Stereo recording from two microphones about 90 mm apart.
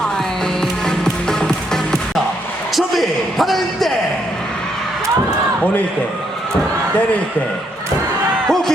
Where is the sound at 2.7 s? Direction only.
Centre (ahead or behind).